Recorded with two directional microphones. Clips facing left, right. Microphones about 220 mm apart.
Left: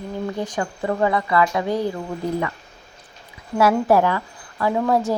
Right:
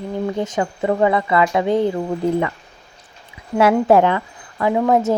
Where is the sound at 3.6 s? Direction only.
25° right (ahead or behind).